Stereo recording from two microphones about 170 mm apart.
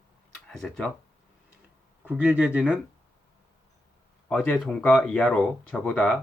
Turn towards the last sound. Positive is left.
turn(degrees=5)  # may be behind; listen again after turning